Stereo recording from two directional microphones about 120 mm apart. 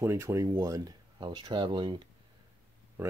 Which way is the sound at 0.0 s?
25° right (ahead or behind).